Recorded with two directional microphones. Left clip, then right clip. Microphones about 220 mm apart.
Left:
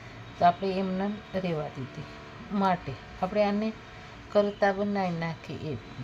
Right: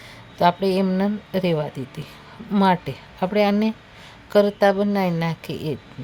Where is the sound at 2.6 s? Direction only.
55° right (ahead or behind).